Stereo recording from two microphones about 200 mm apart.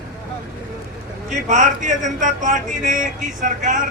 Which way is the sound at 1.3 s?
35° right (ahead or behind).